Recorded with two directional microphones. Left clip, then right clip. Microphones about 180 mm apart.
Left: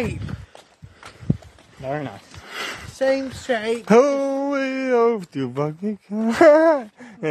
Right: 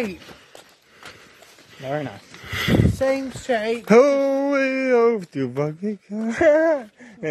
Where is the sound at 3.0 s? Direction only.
35° right (ahead or behind).